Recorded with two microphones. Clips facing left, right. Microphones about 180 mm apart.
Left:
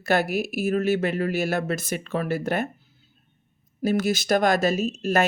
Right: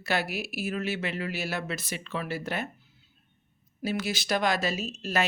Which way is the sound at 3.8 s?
45° left (ahead or behind).